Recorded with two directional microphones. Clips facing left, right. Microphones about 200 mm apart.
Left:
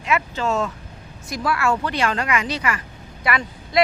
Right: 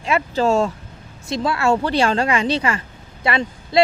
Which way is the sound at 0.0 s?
30° right (ahead or behind).